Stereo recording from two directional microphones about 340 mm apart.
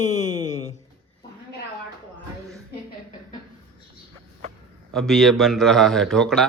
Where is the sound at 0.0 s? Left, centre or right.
Left.